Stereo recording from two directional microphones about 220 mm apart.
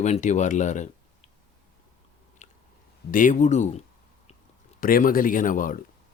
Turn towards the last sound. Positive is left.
turn(degrees=40)  # may be behind; listen again after turning